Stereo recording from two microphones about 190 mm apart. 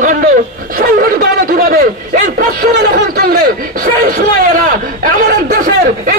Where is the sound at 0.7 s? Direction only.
50° right (ahead or behind).